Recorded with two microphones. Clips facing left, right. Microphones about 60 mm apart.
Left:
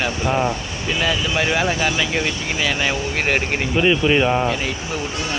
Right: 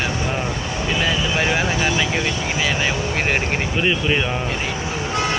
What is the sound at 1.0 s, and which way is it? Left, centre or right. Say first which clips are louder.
Speech: left 1 dB; centre.